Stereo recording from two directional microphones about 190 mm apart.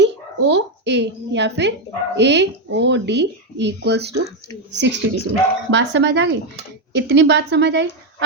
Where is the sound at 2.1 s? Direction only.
65° right (ahead or behind).